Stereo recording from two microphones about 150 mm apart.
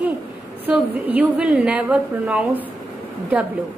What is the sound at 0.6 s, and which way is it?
A woman's voice, 10° right (ahead or behind).